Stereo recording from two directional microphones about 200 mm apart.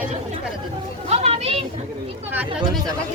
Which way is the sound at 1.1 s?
30° right (ahead or behind).